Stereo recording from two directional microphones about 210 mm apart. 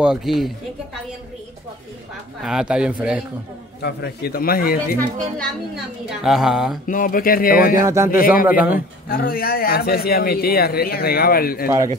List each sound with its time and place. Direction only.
0.0 s a man's voice: centre (ahead or behind)
2.4 s a man's voice: 5° right (ahead or behind)
3.8 s a man's voice: 50° left (ahead or behind)
6.0 s a man's voice: centre (ahead or behind)
6.9 s a man's voice: 40° left (ahead or behind)
7.8 s speech: 15° right (ahead or behind)
8.1 s speech: 40° left (ahead or behind)
8.5 s speech: 5° right (ahead or behind)
8.7 s a man's voice: 45° left (ahead or behind)